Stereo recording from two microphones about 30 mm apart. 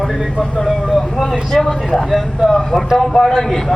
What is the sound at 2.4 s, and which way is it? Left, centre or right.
Speech, centre.